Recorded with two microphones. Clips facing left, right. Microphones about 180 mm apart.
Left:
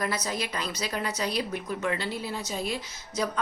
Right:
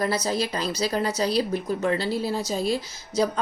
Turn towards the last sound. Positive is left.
turn(degrees=-35)  # may be behind; listen again after turning